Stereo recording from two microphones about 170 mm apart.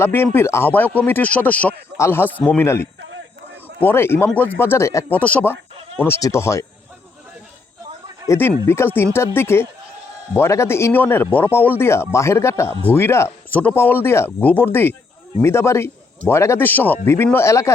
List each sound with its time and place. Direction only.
0.0 s speech: 15° left (ahead or behind)
8.3 s speech: 15° left (ahead or behind)